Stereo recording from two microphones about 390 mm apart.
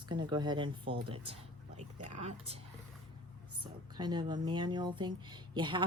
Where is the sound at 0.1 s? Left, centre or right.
Centre.